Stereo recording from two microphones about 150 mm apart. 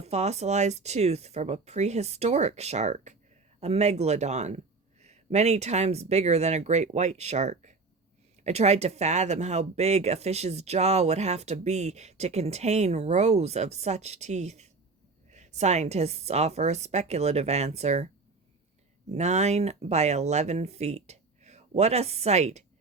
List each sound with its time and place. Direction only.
0.0 s speech: 45° right (ahead or behind)
19.1 s speech: 50° right (ahead or behind)